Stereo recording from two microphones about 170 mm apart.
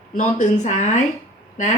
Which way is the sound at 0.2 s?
45° left (ahead or behind).